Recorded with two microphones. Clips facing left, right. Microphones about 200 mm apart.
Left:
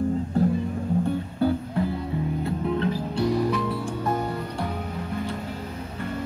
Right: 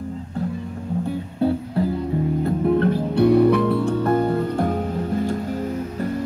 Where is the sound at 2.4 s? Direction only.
50° right (ahead or behind).